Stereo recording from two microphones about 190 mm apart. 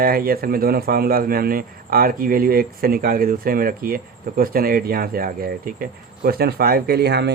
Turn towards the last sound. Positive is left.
turn(degrees=-60)  # may be behind; listen again after turning